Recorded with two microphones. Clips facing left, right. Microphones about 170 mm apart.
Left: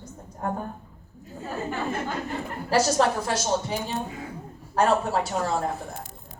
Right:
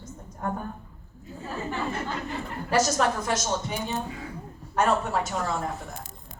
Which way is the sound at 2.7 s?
30° left (ahead or behind).